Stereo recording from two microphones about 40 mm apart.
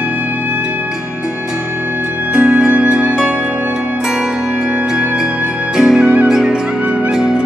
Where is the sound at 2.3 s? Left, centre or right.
Right.